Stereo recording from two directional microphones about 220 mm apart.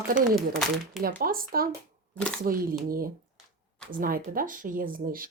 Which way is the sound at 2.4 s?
40° right (ahead or behind).